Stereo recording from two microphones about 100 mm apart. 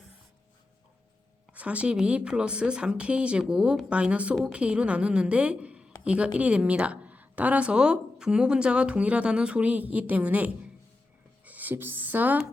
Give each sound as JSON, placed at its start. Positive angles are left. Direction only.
{"t": 1.5, "sound": "a woman's voice", "side_deg": -15}